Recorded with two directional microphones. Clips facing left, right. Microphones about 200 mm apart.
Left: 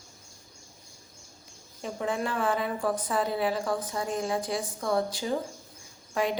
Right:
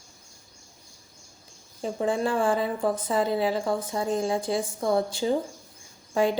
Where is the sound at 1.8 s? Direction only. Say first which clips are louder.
Right 5 dB; 30° right (ahead or behind).